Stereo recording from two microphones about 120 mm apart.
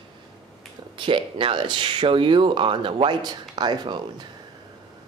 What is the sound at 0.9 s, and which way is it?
Speech, 45° right (ahead or behind).